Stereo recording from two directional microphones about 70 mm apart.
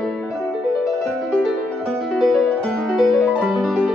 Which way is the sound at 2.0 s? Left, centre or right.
Centre.